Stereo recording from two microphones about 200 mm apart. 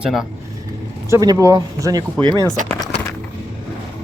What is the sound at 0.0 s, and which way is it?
Speech, centre (ahead or behind).